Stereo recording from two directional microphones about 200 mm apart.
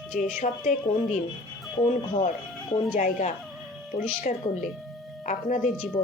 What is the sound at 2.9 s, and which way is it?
Speech, 40° left (ahead or behind).